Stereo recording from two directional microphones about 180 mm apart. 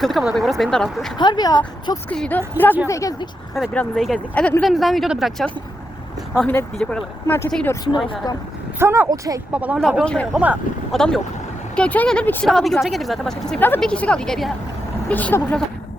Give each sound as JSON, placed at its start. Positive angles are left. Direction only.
{"t": 0.0, "sound": "speech", "side_deg": 0}
{"t": 1.2, "sound": "speech", "side_deg": 25}
{"t": 2.0, "sound": "speech", "side_deg": 5}
{"t": 2.8, "sound": "speech", "side_deg": 15}
{"t": 3.6, "sound": "speech", "side_deg": 0}
{"t": 7.9, "sound": "speech", "side_deg": 25}
{"t": 8.8, "sound": "speech", "side_deg": -15}
{"t": 9.5, "sound": "speech", "side_deg": -5}
{"t": 10.3, "sound": "speech", "side_deg": -5}
{"t": 11.8, "sound": "speech", "side_deg": 5}